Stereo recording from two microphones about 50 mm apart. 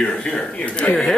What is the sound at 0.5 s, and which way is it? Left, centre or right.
Speech, left.